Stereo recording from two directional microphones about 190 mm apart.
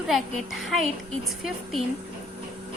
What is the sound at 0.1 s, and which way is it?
Speech, centre (ahead or behind).